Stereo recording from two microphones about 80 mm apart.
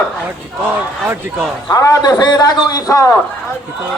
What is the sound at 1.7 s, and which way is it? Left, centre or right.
A man's voice, left.